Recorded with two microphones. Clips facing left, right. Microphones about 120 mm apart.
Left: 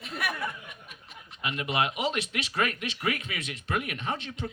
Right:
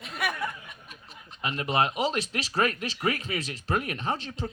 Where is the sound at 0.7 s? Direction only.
35° right (ahead or behind).